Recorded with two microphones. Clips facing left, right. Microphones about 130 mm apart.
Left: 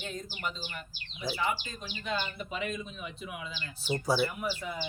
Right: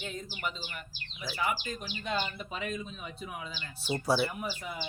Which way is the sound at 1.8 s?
25° right (ahead or behind).